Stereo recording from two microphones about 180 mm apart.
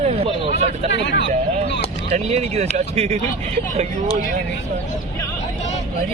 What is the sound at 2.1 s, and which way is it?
Speech, 35° right (ahead or behind).